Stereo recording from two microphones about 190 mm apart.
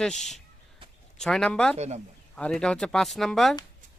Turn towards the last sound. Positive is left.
turn(degrees=0)  # may be behind; listen again after turning